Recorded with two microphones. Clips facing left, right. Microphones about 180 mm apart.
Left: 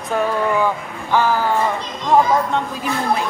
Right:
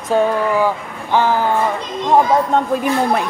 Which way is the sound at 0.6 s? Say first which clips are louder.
Right 2 dB; 20° right (ahead or behind).